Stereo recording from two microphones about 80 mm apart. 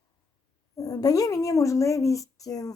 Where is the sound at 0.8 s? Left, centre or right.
Left.